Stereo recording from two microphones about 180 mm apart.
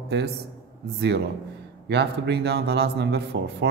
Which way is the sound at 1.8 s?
70° right (ahead or behind).